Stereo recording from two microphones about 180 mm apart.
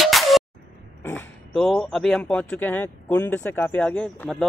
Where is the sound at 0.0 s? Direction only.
Centre (ahead or behind).